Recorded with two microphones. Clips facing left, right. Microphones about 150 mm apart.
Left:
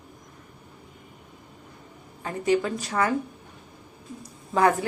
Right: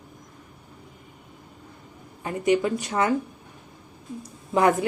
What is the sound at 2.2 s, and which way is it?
Speech, 15° right (ahead or behind).